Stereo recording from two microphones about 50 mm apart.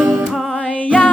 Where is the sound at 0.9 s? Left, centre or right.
Left.